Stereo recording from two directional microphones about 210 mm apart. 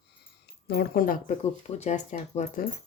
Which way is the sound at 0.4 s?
50° left (ahead or behind).